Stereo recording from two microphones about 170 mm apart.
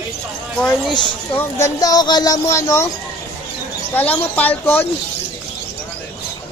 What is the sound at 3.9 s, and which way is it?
Speech, 10° left (ahead or behind).